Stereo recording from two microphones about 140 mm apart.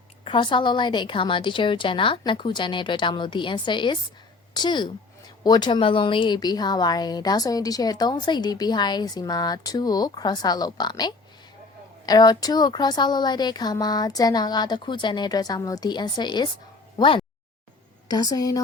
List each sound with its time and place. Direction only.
0.3 s a woman's voice: 35° left (ahead or behind)